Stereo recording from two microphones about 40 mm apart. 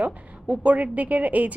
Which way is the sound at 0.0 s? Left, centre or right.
Right.